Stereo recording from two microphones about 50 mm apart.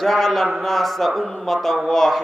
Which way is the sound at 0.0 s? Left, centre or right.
Centre.